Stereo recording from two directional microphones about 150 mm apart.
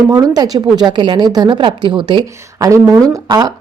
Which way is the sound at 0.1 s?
25° right (ahead or behind).